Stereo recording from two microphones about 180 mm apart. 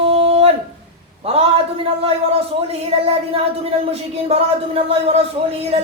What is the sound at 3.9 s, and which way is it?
Speech, 35° right (ahead or behind).